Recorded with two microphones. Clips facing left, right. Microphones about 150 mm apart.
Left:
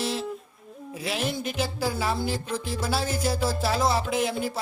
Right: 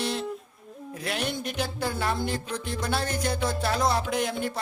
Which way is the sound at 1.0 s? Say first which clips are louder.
Left 2 dB; centre (ahead or behind).